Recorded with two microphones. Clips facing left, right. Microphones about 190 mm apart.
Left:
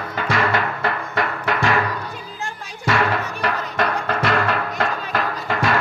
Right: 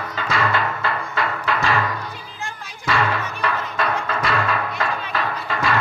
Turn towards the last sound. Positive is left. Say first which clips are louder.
# left 2 dB
turn(degrees=50)  # may be behind; listen again after turning